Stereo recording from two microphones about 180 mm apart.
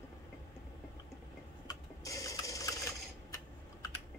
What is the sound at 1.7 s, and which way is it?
Sewing machine, 20° left (ahead or behind).